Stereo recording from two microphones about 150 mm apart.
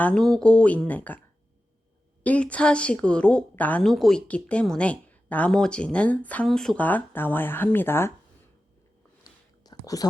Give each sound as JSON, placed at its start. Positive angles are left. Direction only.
{"t": 0.0, "sound": "a woman's voice", "side_deg": 5}
{"t": 2.2, "sound": "a woman's voice", "side_deg": 10}
{"t": 9.6, "sound": "a sound", "side_deg": 25}